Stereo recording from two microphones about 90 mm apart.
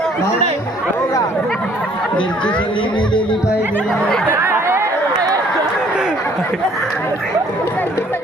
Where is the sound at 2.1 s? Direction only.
10° left (ahead or behind).